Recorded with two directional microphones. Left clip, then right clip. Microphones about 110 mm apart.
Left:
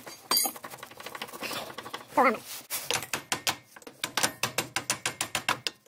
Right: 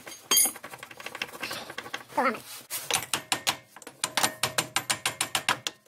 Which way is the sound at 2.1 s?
50° left (ahead or behind).